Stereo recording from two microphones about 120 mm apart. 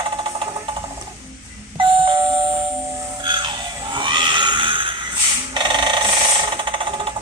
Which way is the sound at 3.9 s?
40° right (ahead or behind).